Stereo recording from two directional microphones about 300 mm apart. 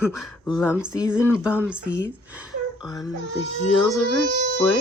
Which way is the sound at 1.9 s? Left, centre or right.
Centre.